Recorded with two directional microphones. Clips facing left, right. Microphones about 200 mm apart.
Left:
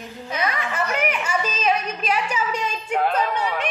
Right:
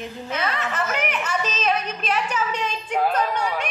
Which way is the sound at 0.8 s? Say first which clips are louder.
Left 2 dB; 5° left (ahead or behind).